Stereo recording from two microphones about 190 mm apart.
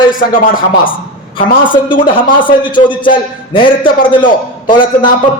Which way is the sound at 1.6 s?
25° left (ahead or behind).